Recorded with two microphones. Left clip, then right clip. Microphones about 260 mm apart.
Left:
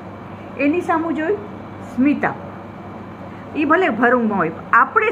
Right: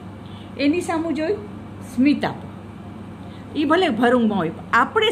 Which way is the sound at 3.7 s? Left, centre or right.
Centre.